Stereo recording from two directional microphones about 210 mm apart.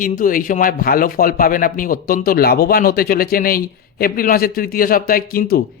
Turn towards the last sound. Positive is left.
turn(degrees=45)  # may be behind; listen again after turning